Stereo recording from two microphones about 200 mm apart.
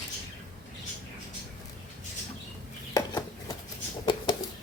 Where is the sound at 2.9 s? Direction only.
15° left (ahead or behind).